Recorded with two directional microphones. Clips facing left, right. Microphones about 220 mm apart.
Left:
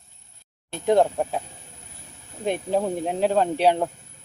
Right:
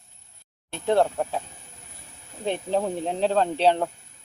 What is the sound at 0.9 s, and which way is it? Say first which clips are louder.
Speech: left 2 dB; 15° left (ahead or behind).